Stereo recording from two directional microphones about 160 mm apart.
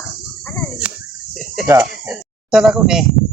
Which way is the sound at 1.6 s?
10° right (ahead or behind).